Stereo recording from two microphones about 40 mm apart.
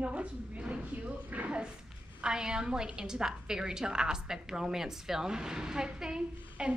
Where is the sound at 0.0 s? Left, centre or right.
Right.